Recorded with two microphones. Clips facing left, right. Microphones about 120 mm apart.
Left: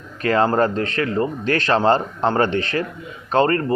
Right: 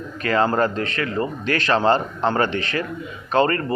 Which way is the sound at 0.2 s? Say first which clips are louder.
Left 2 dB; 45° left (ahead or behind).